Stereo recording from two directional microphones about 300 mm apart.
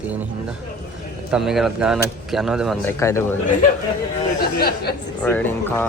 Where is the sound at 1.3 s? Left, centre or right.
Centre.